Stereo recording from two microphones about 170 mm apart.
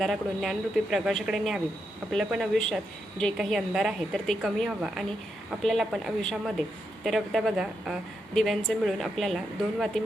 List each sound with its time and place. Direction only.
0.0 s a woman's voice: centre (ahead or behind)